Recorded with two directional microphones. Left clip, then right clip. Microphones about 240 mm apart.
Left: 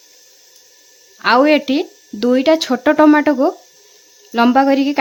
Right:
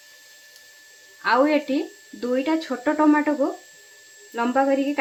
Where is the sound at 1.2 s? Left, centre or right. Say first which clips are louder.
Left 7 dB; left.